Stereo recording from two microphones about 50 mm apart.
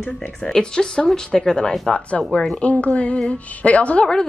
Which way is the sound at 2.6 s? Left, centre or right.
Left.